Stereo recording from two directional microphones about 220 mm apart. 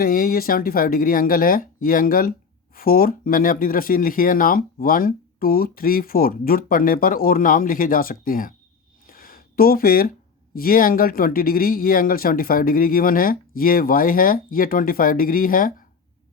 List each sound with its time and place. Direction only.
0.0 s speech: 40° left (ahead or behind)
9.0 s a sound: 40° left (ahead or behind)
10.5 s speech: 40° left (ahead or behind)